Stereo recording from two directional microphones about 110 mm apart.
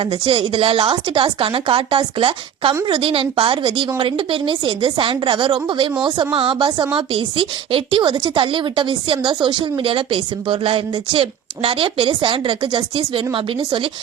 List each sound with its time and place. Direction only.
0.0 s a woman's voice: 50° right (ahead or behind)